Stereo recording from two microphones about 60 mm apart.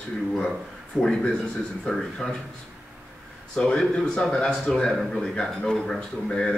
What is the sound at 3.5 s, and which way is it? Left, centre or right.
Speech, centre.